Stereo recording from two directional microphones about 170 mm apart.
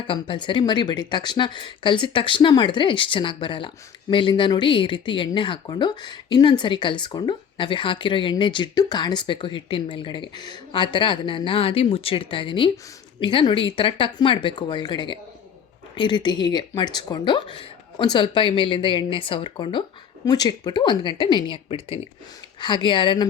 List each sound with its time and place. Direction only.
0.1 s speech: 30° left (ahead or behind)